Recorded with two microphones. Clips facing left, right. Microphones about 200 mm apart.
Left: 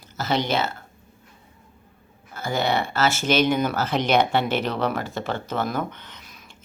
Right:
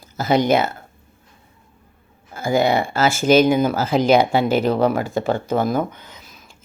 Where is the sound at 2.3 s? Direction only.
10° right (ahead or behind).